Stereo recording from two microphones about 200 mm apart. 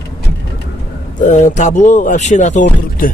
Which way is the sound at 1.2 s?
40° left (ahead or behind).